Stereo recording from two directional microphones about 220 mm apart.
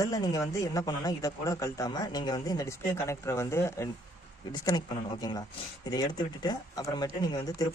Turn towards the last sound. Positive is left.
turn(degrees=15)  # may be behind; listen again after turning